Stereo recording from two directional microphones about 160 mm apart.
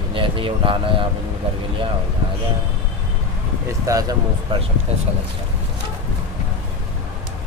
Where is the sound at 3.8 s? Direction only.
20° right (ahead or behind).